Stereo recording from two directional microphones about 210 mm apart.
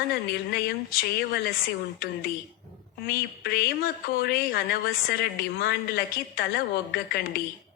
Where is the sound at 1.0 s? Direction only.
50° left (ahead or behind).